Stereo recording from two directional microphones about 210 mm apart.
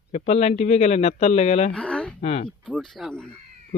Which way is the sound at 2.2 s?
30° left (ahead or behind).